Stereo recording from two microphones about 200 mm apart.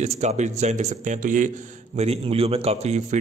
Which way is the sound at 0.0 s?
35° right (ahead or behind).